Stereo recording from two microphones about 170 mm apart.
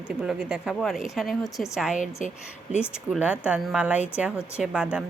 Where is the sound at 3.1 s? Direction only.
5° right (ahead or behind).